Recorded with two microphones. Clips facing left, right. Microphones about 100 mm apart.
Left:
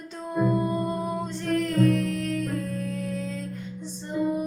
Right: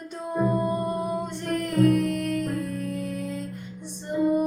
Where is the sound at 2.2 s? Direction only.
60° right (ahead or behind).